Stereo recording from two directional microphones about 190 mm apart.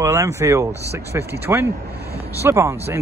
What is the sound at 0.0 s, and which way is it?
Speech, 15° right (ahead or behind).